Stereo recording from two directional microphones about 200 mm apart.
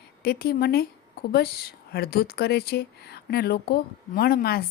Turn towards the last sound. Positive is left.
turn(degrees=50)  # may be behind; listen again after turning